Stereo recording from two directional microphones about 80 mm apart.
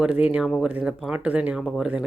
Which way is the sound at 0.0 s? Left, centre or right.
Centre.